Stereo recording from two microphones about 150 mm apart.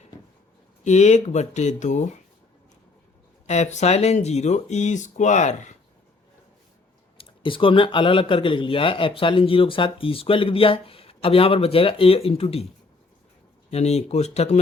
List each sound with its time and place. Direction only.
0.9 s speech: 50° left (ahead or behind)
3.4 s speech: 50° left (ahead or behind)
7.2 s speech: 35° left (ahead or behind)
13.7 s speech: 45° left (ahead or behind)